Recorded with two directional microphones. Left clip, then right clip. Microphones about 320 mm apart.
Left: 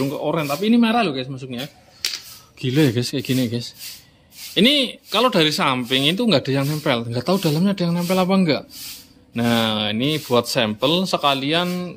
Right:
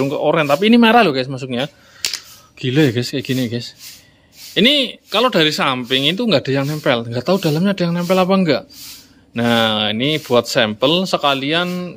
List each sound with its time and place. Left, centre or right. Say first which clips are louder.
0.0 s speech: right 7 dB; centre
2.6 s speech: right 3 dB; centre